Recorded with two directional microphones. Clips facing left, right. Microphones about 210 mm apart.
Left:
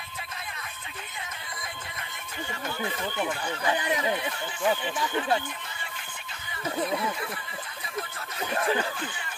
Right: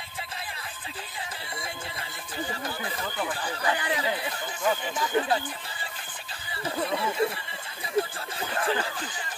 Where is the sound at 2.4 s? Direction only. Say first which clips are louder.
Even; 35° right (ahead or behind).